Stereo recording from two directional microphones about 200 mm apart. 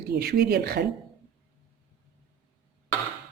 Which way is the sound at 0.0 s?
50° right (ahead or behind).